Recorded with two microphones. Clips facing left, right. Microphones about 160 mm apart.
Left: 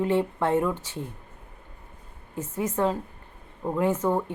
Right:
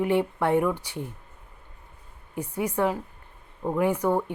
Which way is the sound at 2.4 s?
15° right (ahead or behind).